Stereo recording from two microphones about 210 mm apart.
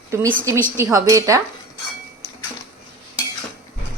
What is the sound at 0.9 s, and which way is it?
Speech, 15° right (ahead or behind).